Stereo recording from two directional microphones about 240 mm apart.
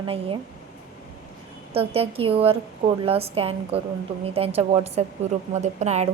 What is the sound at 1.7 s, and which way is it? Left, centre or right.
A woman's voice, right.